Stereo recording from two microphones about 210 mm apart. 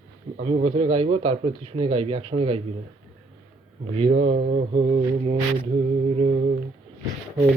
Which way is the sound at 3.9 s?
25° right (ahead or behind).